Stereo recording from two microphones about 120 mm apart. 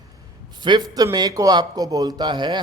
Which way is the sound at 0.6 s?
35° right (ahead or behind).